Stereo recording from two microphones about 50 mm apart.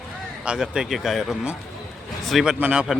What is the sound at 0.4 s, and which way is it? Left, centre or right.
Speech, centre.